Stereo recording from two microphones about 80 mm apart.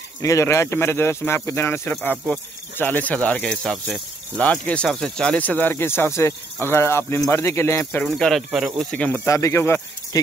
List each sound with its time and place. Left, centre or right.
0.2 s speech: left; by 4.0 s centre
4.4 s speech: centre
4.8 s speech: centre; by 8.1 s left
8.1 s speech: centre
8.9 s speech: centre
9.2 s speech: left
10.1 s speech: left